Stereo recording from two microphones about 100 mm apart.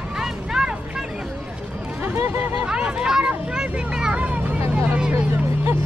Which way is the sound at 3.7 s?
10° right (ahead or behind).